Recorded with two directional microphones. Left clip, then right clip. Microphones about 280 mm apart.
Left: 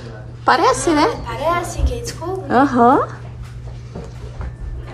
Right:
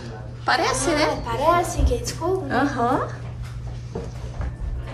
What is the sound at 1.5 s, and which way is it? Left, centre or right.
Speech, right.